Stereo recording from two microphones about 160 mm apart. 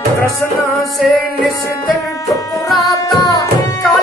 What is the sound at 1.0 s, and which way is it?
Music, centre (ahead or behind).